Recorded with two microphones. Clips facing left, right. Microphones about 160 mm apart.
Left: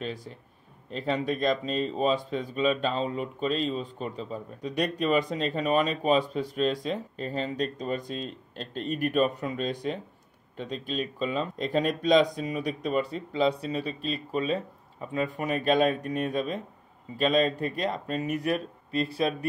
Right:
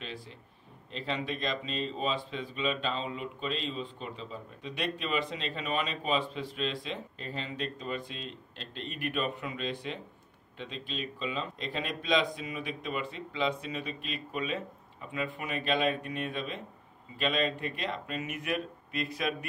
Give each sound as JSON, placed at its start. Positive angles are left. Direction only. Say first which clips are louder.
{"t": 0.0, "sound": "speech", "louder": "left 7 dB", "side_deg": 45}